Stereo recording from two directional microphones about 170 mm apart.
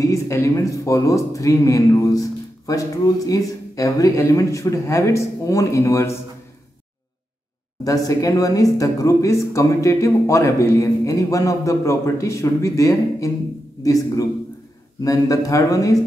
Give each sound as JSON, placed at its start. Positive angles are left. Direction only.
{"t": 0.0, "sound": "speech", "side_deg": 15}
{"t": 7.8, "sound": "speech", "side_deg": 20}